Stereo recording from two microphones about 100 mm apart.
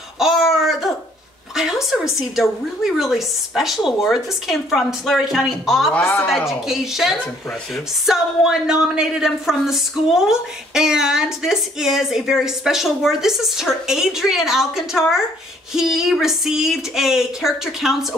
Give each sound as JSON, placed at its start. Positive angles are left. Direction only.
{"t": 0.2, "sound": "a sound", "side_deg": -5}
{"t": 1.5, "sound": "a woman's voice", "side_deg": -5}
{"t": 5.9, "sound": "a woman's voice", "side_deg": 20}
{"t": 6.2, "sound": "a woman's voice", "side_deg": 0}